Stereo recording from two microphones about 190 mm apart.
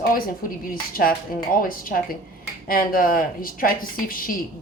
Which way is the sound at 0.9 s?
50° left (ahead or behind).